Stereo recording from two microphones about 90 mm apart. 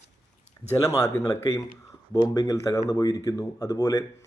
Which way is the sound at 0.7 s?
35° left (ahead or behind).